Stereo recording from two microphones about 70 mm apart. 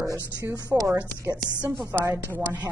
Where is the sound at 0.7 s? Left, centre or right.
Centre.